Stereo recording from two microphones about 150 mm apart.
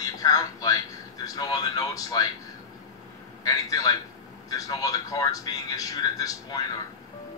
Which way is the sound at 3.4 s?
25° left (ahead or behind).